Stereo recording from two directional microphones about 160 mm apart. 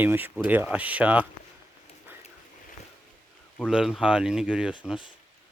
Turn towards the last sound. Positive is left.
turn(degrees=-5)  # may be behind; listen again after turning